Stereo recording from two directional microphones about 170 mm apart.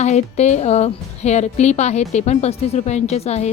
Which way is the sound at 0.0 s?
40° left (ahead or behind).